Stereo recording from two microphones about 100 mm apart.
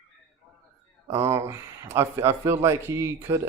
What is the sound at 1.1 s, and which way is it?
Speech, 25° right (ahead or behind).